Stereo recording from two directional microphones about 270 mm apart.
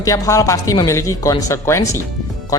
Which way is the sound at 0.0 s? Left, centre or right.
Centre.